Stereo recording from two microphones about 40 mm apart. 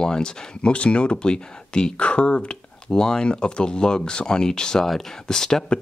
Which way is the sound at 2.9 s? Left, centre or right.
Centre.